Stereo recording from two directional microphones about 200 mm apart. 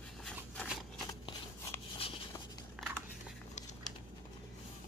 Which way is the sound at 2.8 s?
5° right (ahead or behind).